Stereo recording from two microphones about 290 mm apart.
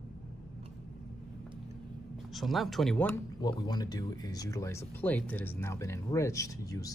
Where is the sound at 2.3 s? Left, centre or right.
Centre.